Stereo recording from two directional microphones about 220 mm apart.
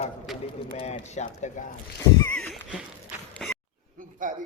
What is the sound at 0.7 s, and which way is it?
Speech, 30° left (ahead or behind).